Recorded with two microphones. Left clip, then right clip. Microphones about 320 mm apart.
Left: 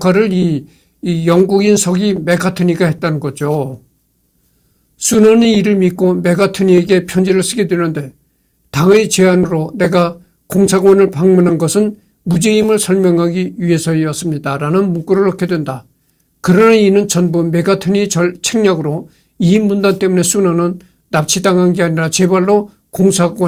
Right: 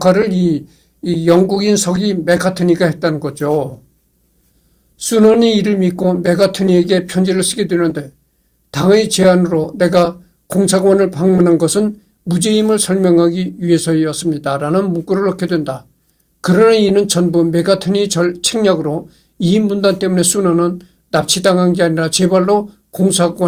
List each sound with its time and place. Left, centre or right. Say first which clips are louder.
1.2 s speech: left 1 dB; left
5.0 s speech: left 1 dB; left